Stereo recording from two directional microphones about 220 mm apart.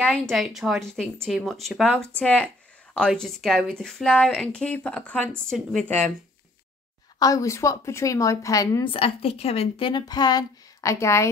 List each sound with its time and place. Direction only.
0.0 s speech: 5° left (ahead or behind)
7.2 s a woman's voice: 15° left (ahead or behind)